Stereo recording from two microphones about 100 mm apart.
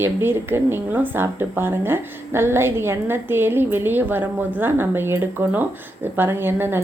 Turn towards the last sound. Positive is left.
turn(degrees=-20)  # may be behind; listen again after turning